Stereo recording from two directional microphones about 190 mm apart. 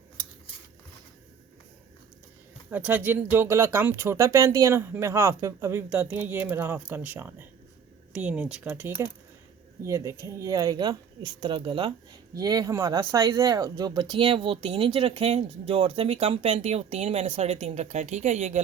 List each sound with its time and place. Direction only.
2.6 s speech: 10° right (ahead or behind); by 18.6 s 35° right (ahead or behind)